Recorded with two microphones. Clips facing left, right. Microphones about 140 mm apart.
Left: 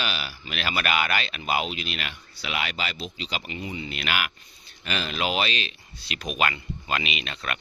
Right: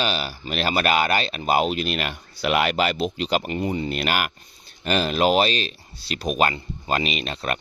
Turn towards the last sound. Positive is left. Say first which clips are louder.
# right 6 dB
turn(degrees=-40)  # may be behind; listen again after turning